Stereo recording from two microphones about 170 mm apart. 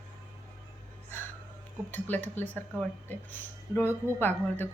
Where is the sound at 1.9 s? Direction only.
10° left (ahead or behind).